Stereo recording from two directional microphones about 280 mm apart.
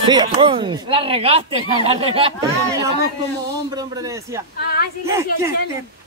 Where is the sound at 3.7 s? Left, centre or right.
Centre.